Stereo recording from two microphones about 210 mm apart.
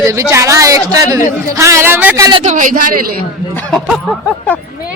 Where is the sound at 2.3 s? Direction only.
25° right (ahead or behind).